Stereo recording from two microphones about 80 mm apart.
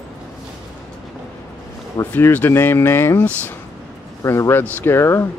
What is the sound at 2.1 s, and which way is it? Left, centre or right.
Speech, left.